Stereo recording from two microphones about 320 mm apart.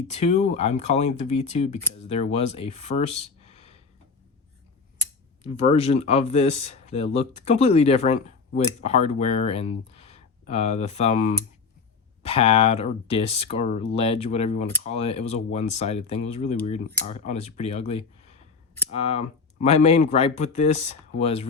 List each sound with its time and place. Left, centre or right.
0.1 s speech: centre
4.9 s speech: centre